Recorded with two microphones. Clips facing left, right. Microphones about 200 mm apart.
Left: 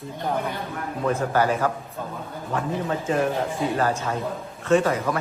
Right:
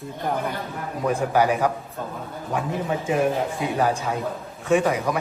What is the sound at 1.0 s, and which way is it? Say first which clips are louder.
A man's voice: right 1 dB; 10° right (ahead or behind).